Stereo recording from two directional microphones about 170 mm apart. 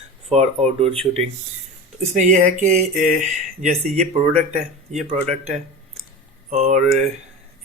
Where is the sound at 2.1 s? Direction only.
45° right (ahead or behind).